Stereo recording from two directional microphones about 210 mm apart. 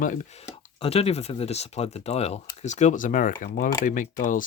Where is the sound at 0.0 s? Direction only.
35° left (ahead or behind).